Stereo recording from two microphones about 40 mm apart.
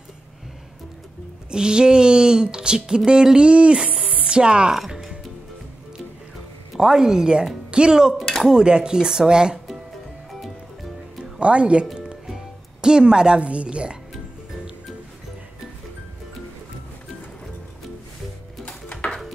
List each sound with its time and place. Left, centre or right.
1.5 s speech: right
4.7 s music: centre
6.8 s speech: centre
8.2 s chink: centre
8.5 s speech: right
11.3 s music: right
12.8 s speech: centre
13.4 s speech: right
18.7 s a sound: left